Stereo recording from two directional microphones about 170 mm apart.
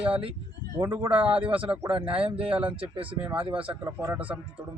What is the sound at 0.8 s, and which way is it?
Speech, 15° right (ahead or behind).